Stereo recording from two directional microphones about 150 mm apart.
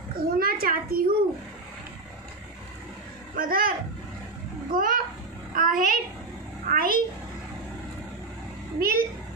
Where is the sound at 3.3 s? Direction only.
75° right (ahead or behind).